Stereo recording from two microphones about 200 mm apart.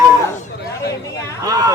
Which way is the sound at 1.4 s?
15° right (ahead or behind).